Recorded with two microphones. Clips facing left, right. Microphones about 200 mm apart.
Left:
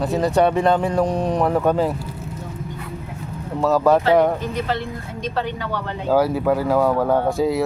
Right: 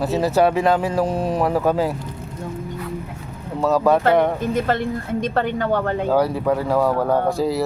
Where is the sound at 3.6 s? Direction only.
Centre (ahead or behind).